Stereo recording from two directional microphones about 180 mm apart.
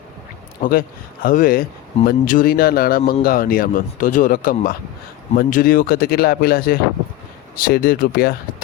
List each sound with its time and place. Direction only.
0.6 s speech: 55° left (ahead or behind)